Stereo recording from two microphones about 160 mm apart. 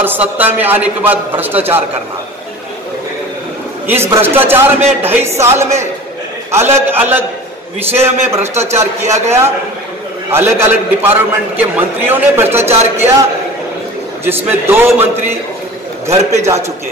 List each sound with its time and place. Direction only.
0.0 s a man's voice: 10° right (ahead or behind)
3.8 s a man's voice: 15° right (ahead or behind)
9.0 s speech: 45° right (ahead or behind)
10.3 s a man's voice: 15° right (ahead or behind)
12.6 s speech: 40° right (ahead or behind)
14.2 s a man's voice: 15° right (ahead or behind)